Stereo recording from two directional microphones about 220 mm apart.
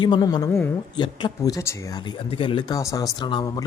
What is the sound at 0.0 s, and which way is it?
A man's voice, 20° left (ahead or behind).